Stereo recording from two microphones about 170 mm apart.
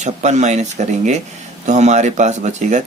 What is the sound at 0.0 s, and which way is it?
Speech, 40° right (ahead or behind).